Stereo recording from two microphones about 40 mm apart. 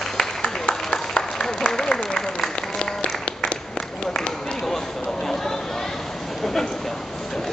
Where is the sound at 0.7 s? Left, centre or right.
Centre.